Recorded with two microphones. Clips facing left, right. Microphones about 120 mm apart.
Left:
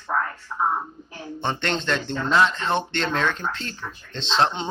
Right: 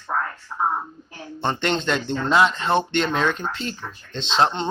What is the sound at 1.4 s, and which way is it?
Speech, 5° right (ahead or behind).